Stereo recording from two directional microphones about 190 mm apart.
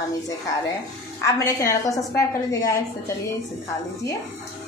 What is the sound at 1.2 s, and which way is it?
A woman's voice, 15° left (ahead or behind).